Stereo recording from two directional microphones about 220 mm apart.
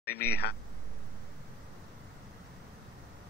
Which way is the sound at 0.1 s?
45° left (ahead or behind).